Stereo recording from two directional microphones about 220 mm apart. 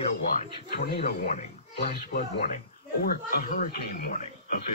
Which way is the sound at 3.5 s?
45° left (ahead or behind).